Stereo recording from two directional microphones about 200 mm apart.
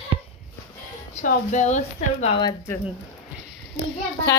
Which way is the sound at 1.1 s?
35° left (ahead or behind).